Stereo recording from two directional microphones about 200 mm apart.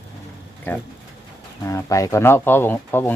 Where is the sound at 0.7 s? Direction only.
10° left (ahead or behind).